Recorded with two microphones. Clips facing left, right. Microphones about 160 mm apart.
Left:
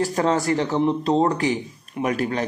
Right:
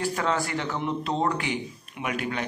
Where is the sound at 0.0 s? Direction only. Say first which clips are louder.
Left 6 dB; 35° left (ahead or behind).